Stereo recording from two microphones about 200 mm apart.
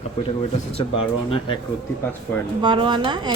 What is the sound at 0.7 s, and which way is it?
Speech, 25° left (ahead or behind).